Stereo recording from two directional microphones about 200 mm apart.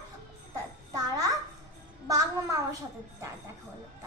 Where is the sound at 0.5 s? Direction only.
15° right (ahead or behind).